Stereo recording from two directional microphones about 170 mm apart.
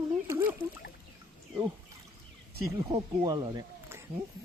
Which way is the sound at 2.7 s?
25° right (ahead or behind).